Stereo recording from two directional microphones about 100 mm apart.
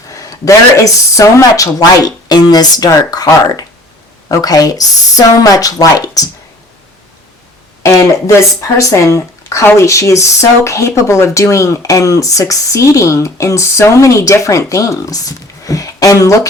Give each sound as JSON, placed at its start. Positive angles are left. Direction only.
{"t": 0.2, "sound": "a sound", "side_deg": 35}
{"t": 1.1, "sound": "speech", "side_deg": 35}
{"t": 7.8, "sound": "speech", "side_deg": 30}